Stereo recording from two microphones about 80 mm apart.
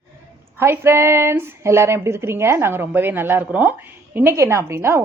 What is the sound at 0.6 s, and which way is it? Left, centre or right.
Speech, right.